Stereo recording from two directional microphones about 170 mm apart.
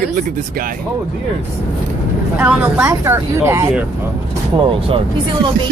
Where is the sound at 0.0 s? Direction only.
60° right (ahead or behind).